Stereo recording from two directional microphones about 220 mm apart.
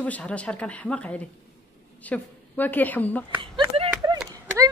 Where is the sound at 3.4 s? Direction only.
20° right (ahead or behind).